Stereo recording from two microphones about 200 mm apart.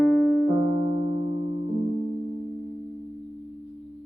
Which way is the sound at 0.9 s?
30° right (ahead or behind).